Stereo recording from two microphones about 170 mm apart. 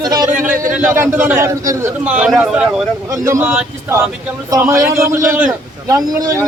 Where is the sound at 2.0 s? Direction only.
5° right (ahead or behind).